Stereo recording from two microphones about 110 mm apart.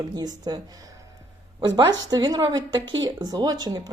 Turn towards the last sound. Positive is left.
turn(degrees=-35)  # may be behind; listen again after turning